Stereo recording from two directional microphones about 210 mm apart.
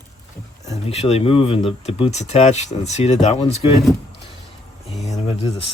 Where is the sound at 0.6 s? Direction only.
30° left (ahead or behind).